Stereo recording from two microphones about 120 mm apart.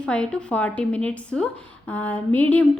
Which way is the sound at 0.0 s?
10° left (ahead or behind).